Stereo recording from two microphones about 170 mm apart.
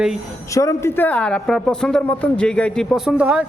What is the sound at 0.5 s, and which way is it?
A woman's voice, 20° left (ahead or behind).